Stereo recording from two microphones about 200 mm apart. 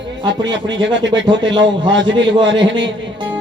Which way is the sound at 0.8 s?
65° right (ahead or behind).